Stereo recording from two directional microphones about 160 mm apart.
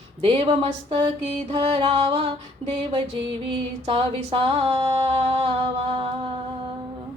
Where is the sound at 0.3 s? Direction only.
30° right (ahead or behind).